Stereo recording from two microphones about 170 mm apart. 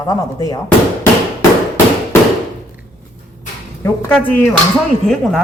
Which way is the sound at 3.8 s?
15° left (ahead or behind).